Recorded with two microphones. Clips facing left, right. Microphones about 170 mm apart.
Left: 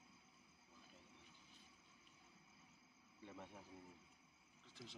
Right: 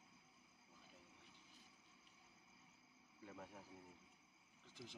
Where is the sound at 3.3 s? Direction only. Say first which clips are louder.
Even; centre (ahead or behind).